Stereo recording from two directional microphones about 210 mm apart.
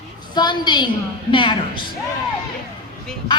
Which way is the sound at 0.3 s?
20° left (ahead or behind).